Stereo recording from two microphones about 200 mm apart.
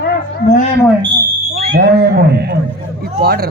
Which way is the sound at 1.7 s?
55° right (ahead or behind).